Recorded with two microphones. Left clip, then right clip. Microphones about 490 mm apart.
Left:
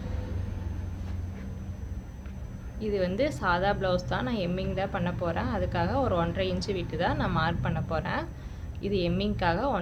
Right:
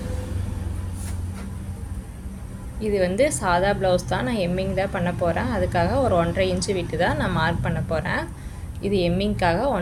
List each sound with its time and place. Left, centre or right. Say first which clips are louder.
2.8 s a woman's voice: right 7 dB; left